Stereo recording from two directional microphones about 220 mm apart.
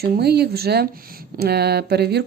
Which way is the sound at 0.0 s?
45° right (ahead or behind).